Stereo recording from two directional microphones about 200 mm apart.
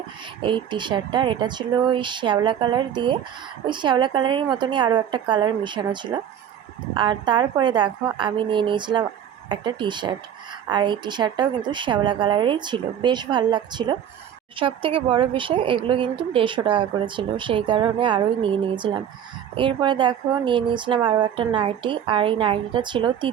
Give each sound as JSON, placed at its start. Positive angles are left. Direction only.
{"t": 0.4, "sound": "speech", "side_deg": -25}
{"t": 19.5, "sound": "speech", "side_deg": -25}